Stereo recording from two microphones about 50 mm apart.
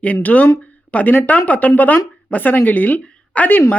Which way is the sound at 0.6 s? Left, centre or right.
Left.